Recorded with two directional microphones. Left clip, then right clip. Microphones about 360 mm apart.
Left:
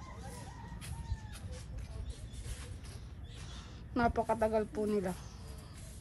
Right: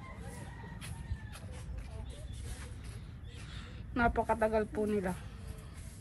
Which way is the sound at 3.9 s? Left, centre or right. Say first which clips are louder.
Right 1 dB; centre.